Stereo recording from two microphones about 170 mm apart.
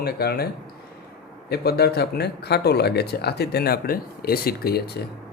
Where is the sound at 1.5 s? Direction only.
70° left (ahead or behind).